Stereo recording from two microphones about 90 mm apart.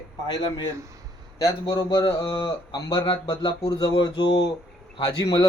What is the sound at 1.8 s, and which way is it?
Speech, 60° left (ahead or behind).